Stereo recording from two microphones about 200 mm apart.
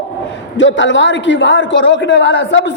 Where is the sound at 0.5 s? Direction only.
70° left (ahead or behind).